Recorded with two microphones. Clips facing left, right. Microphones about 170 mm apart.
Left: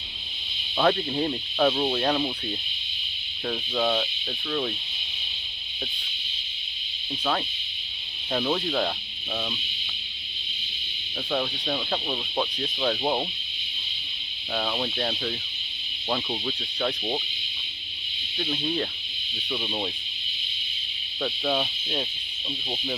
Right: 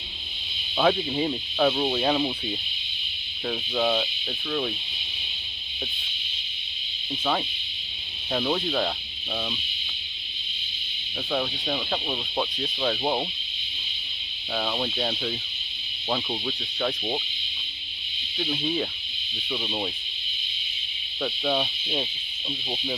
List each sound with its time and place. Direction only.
0.8 s speech: 5° right (ahead or behind)
8.3 s speech: centre (ahead or behind)
11.3 s speech: centre (ahead or behind)
14.5 s speech: centre (ahead or behind)
18.3 s speech: 5° right (ahead or behind)
21.2 s speech: 5° right (ahead or behind)